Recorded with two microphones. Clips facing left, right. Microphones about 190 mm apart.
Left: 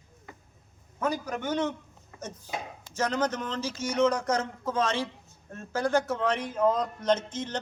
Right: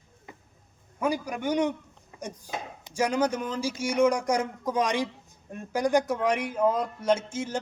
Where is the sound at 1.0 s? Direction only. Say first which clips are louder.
Right 2 dB; 10° right (ahead or behind).